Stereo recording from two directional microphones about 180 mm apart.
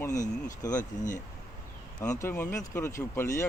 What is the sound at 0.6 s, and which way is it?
Speech, 20° left (ahead or behind).